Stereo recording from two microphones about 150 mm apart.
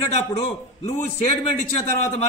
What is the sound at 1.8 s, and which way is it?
Speech, 45° left (ahead or behind).